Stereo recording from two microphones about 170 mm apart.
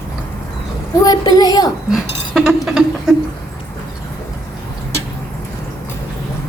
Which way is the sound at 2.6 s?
5° right (ahead or behind).